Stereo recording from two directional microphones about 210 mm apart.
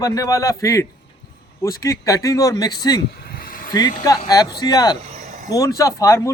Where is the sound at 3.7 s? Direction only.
20° left (ahead or behind).